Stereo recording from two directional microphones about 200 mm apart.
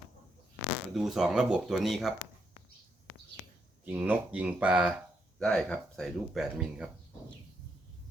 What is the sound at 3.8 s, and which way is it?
Speech, 5° right (ahead or behind).